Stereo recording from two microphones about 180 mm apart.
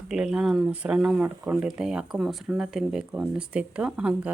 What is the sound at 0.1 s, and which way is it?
Speech, 5° right (ahead or behind).